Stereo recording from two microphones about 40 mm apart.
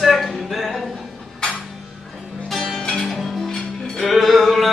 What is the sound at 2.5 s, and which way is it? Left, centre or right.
Music, centre.